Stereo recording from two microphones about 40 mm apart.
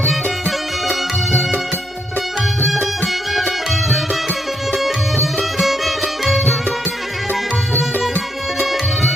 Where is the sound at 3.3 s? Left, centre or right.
Centre.